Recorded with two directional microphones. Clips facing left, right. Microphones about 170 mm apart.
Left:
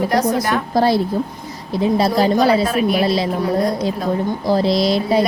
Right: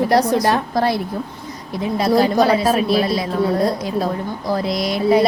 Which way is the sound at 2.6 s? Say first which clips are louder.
Right 1 dB; 30° right (ahead or behind).